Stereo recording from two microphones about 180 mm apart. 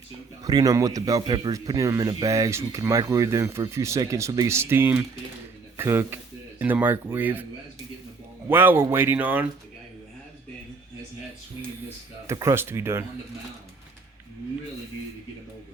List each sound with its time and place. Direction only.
0.4 s speech: 20° right (ahead or behind)
8.4 s speech: 10° right (ahead or behind)
12.3 s speech: 15° right (ahead or behind)